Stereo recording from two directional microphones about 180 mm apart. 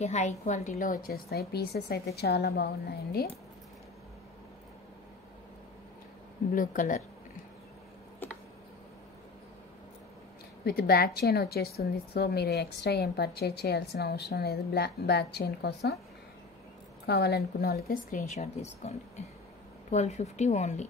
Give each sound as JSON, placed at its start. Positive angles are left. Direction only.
{"t": 0.0, "sound": "a woman's voice", "side_deg": 40}
{"t": 6.5, "sound": "a woman's voice", "side_deg": 45}
{"t": 10.6, "sound": "a woman's voice", "side_deg": 60}
{"t": 17.0, "sound": "a woman's voice", "side_deg": 65}